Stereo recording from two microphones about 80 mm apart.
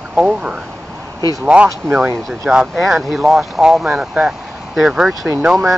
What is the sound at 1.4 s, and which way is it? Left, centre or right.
Speech, centre.